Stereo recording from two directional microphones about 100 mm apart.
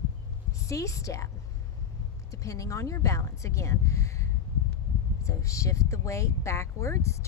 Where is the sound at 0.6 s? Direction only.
30° left (ahead or behind).